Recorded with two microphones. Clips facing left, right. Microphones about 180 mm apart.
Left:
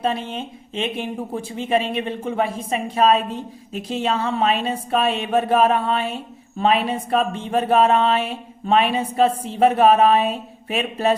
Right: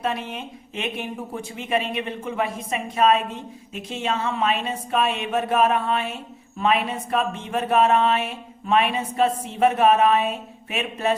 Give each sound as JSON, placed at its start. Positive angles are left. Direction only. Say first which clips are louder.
{"t": 0.0, "sound": "speech", "louder": "left 3 dB", "side_deg": 30}